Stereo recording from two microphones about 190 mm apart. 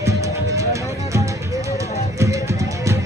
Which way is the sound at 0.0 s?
15° right (ahead or behind).